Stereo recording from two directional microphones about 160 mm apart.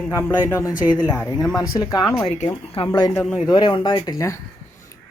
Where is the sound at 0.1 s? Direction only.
15° left (ahead or behind).